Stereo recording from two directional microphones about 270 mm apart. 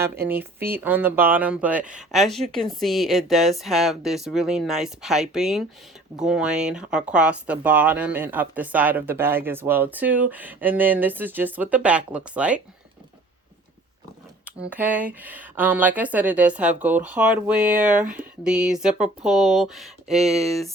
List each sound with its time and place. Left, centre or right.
0.0 s speech: centre
14.4 s speech: centre